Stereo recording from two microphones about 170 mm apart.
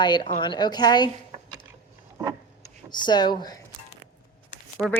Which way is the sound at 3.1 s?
25° left (ahead or behind).